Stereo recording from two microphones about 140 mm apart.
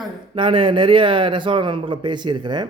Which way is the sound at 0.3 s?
35° right (ahead or behind).